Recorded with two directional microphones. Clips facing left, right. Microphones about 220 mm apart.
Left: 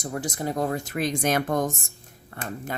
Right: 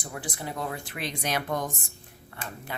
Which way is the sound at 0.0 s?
40° left (ahead or behind).